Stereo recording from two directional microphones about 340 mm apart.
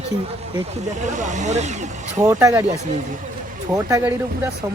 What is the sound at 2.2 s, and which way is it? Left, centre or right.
Speech, centre.